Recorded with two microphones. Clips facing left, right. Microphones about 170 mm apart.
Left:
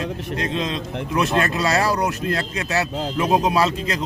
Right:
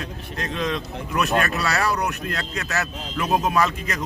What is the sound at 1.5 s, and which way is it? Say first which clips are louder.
Speech: left 3 dB; 35° left (ahead or behind).